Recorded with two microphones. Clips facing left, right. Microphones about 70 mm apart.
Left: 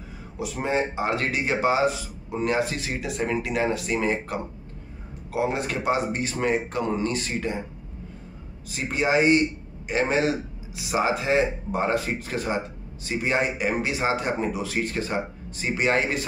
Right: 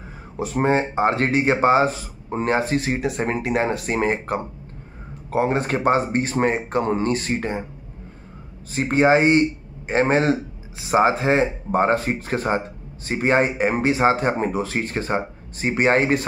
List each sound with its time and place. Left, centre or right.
0.4 s speech: right
8.7 s speech: right